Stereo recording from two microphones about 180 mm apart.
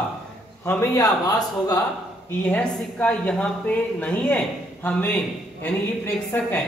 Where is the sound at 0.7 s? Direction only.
15° left (ahead or behind).